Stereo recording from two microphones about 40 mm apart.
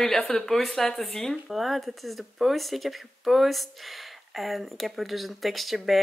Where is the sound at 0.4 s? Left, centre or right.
Centre.